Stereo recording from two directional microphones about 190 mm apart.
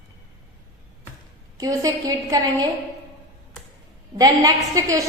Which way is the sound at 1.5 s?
20° right (ahead or behind).